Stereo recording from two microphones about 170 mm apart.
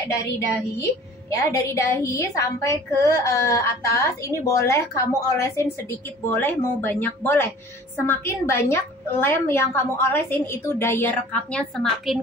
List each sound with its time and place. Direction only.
1.3 s a woman's voice: 20° left (ahead or behind)